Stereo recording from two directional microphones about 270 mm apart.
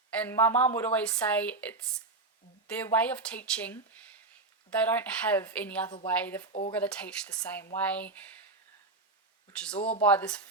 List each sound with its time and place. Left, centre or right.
0.2 s a woman's voice: centre
2.7 s speech: centre
4.8 s a woman's voice: centre
6.5 s speech: left
6.7 s speech: centre
9.7 s speech: centre
10.0 s speech: centre